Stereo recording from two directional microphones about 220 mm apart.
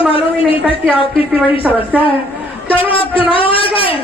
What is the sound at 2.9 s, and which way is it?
A woman's voice, 25° left (ahead or behind).